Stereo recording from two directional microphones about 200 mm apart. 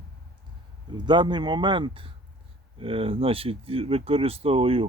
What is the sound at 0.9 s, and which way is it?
Speech, 25° right (ahead or behind).